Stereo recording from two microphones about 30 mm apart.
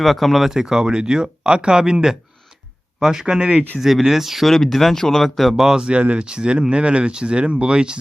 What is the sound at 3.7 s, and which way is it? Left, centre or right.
Speech, centre.